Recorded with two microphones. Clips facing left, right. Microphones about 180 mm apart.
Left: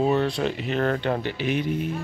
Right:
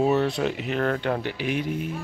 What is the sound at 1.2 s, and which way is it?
Speech, 10° right (ahead or behind).